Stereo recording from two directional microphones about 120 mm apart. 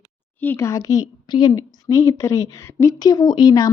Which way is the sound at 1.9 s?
25° left (ahead or behind).